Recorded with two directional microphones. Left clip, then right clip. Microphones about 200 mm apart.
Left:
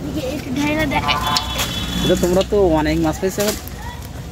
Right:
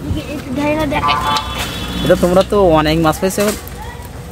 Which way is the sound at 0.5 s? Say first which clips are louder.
Right 4 dB; 10° right (ahead or behind).